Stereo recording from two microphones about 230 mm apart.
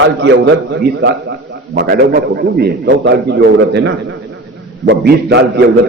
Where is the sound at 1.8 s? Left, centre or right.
Right.